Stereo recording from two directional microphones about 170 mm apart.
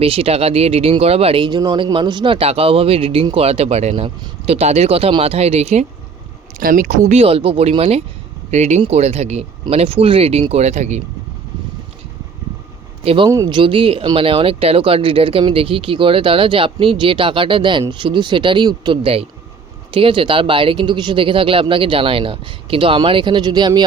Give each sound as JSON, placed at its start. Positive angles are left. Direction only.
{"t": 0.0, "sound": "speech", "side_deg": -35}
{"t": 6.6, "sound": "speech", "side_deg": -55}
{"t": 13.0, "sound": "speech", "side_deg": -35}
{"t": 13.2, "sound": "speech", "side_deg": -20}